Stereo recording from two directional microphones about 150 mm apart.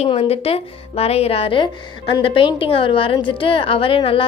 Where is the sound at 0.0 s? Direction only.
40° left (ahead or behind).